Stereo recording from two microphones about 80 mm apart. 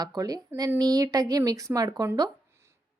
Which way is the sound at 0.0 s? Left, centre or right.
Right.